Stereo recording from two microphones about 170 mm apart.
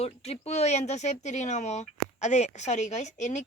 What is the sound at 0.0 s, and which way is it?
Speech, 40° left (ahead or behind).